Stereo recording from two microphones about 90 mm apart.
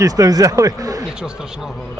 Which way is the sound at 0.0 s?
40° right (ahead or behind).